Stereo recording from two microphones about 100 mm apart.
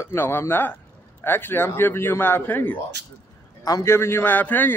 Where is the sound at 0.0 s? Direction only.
25° left (ahead or behind).